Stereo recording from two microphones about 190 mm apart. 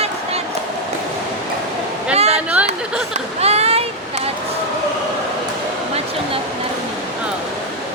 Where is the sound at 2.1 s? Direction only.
35° right (ahead or behind).